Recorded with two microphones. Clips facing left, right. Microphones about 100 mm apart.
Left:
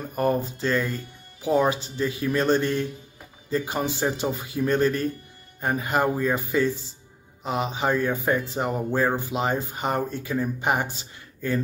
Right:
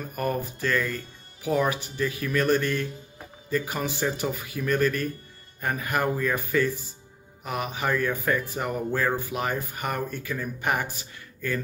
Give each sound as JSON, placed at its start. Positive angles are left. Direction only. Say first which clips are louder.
{"t": 0.1, "sound": "speech", "louder": "left 5 dB", "side_deg": 30}